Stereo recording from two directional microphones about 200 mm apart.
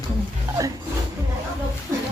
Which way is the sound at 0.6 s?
15° right (ahead or behind).